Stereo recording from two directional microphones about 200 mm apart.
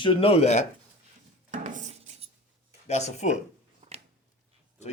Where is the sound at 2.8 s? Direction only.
35° left (ahead or behind).